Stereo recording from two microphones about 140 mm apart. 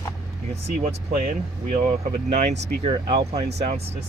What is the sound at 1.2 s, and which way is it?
Speech, 65° right (ahead or behind).